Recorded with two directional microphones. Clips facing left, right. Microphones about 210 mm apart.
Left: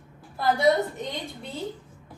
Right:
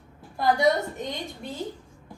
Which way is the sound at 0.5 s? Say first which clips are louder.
Left 2 dB; 20° right (ahead or behind).